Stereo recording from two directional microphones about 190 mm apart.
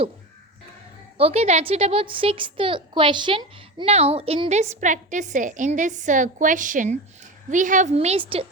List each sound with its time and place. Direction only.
1.2 s a child's voice: 35° right (ahead or behind)